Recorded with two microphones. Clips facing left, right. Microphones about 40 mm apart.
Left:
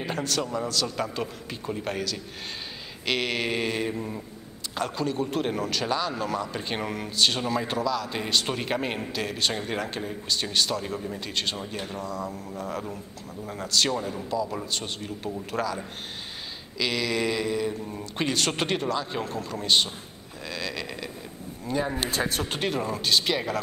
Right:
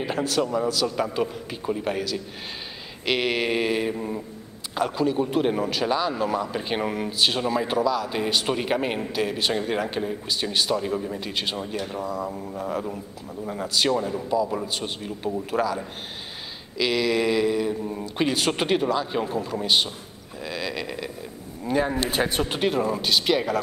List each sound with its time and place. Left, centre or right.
0.0 s a man's voice: centre
20.4 s a sound: centre
21.6 s speech: right
22.5 s speech: centre